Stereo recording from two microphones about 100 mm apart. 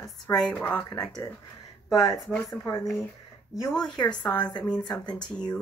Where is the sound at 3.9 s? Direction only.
45° left (ahead or behind).